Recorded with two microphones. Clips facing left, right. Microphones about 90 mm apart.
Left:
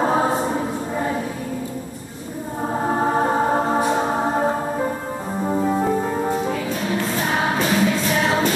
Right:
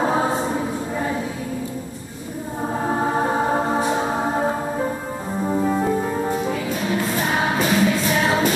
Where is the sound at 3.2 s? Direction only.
35° left (ahead or behind).